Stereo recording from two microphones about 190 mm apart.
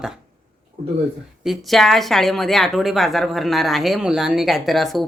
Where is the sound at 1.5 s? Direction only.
Centre (ahead or behind).